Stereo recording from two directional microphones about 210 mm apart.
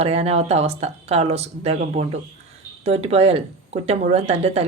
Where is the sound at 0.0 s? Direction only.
30° right (ahead or behind).